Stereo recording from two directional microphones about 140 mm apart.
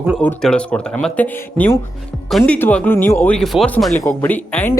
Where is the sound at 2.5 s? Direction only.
10° left (ahead or behind).